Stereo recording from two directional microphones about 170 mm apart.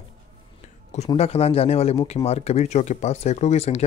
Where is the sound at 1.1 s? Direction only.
35° left (ahead or behind).